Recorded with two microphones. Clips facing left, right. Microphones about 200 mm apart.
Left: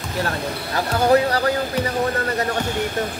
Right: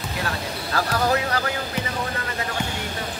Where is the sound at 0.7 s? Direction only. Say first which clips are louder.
Left 6 dB; 25° left (ahead or behind).